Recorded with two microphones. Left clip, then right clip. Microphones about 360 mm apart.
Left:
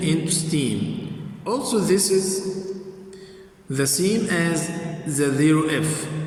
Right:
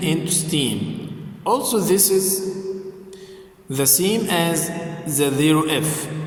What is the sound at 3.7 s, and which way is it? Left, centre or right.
Mantra, centre.